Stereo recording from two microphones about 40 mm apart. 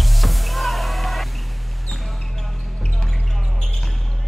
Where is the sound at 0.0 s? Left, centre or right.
Centre.